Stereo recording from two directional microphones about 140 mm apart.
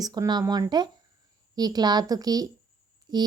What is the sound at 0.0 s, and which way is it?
A woman's voice, 25° right (ahead or behind).